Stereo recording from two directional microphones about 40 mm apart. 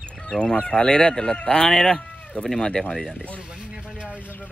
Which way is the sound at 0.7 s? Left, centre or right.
Left.